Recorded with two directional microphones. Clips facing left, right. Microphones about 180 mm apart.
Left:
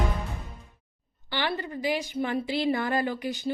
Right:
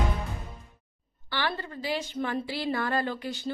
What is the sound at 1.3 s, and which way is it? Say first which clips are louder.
A woman's voice: left 2 dB; 20° left (ahead or behind).